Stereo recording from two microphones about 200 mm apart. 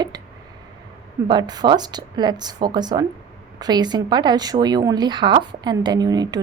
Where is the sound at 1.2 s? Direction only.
20° right (ahead or behind).